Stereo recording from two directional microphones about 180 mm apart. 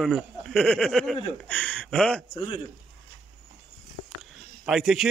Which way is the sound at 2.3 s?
30° left (ahead or behind).